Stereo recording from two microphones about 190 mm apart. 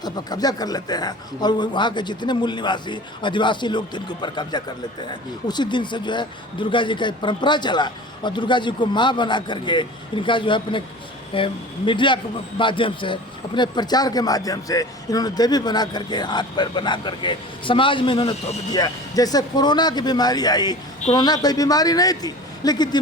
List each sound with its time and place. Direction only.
0.0 s a man's voice: 20° left (ahead or behind)